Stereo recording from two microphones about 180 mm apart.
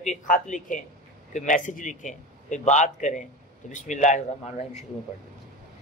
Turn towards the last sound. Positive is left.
turn(degrees=40)  # may be behind; listen again after turning